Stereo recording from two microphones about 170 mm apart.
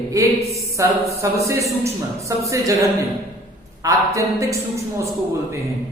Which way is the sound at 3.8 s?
20° right (ahead or behind).